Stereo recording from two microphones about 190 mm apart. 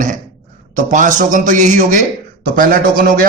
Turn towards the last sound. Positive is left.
turn(degrees=-45)  # may be behind; listen again after turning